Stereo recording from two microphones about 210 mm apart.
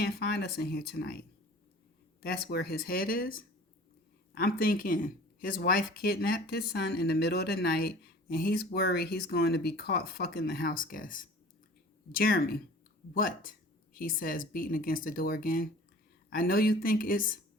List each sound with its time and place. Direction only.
0.0 s speech: 50° left (ahead or behind)
2.2 s speech: 45° left (ahead or behind)